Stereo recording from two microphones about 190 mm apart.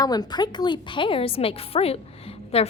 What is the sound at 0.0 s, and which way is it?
A woman's voice, 20° left (ahead or behind).